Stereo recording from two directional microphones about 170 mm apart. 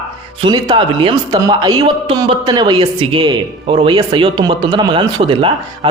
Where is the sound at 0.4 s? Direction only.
25° right (ahead or behind).